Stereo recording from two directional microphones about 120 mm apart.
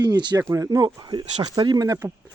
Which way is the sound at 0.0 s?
40° right (ahead or behind).